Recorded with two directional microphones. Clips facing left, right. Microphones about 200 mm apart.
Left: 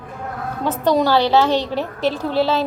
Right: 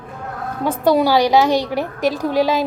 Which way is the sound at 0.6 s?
10° right (ahead or behind).